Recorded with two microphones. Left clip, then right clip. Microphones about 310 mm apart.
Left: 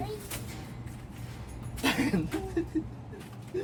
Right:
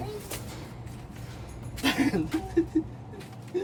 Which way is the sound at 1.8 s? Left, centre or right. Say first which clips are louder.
Right 2 dB; centre.